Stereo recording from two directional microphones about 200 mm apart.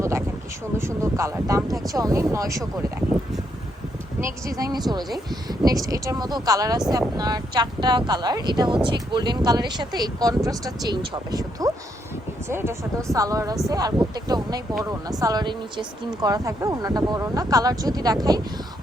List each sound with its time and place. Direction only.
0.8 s speech: 15° right (ahead or behind)
1.6 s speech: centre (ahead or behind)
1.9 s speech: 15° right (ahead or behind)
4.2 s speech: 15° right (ahead or behind)